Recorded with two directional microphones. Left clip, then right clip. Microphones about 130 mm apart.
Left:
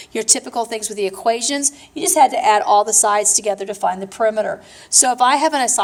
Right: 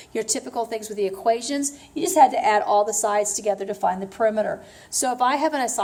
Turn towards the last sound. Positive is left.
turn(degrees=25)  # may be behind; listen again after turning